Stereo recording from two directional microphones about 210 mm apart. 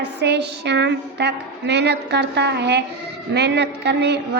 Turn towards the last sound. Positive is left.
turn(degrees=-50)  # may be behind; listen again after turning